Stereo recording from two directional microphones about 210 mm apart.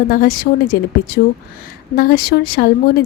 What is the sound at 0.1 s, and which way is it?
A woman's voice, 45° left (ahead or behind).